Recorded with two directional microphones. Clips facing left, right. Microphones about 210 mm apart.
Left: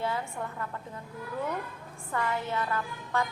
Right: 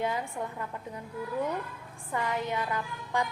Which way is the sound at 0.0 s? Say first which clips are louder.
Right 1 dB; 15° right (ahead or behind).